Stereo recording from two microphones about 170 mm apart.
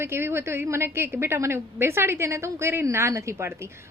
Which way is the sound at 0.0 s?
15° right (ahead or behind).